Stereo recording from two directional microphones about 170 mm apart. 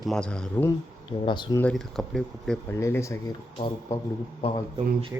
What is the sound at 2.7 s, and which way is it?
Speech, 15° left (ahead or behind).